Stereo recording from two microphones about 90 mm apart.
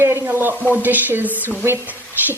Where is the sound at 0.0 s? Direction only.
25° right (ahead or behind).